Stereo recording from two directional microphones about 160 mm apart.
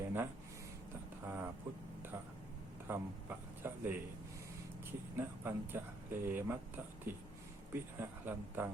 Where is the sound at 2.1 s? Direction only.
15° right (ahead or behind).